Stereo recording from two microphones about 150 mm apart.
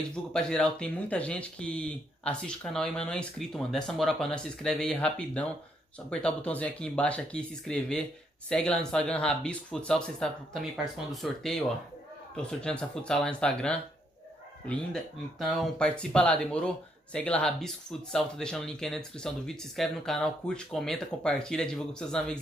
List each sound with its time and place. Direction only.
0.1 s speech: 5° left (ahead or behind)